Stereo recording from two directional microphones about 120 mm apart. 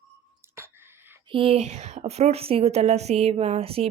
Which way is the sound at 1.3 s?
50° right (ahead or behind).